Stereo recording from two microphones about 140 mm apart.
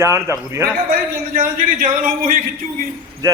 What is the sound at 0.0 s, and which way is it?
Speech, 20° right (ahead or behind).